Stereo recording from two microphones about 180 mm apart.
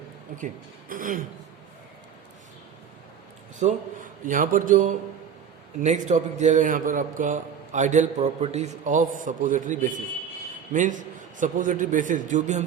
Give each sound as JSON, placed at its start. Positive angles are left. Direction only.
{"t": 0.3, "sound": "a man's voice", "side_deg": -45}
{"t": 3.6, "sound": "a man's voice", "side_deg": -45}